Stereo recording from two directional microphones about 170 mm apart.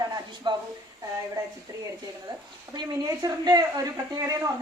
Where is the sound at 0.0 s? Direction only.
25° right (ahead or behind).